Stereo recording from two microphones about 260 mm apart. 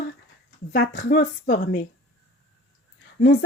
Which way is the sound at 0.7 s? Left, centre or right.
Left.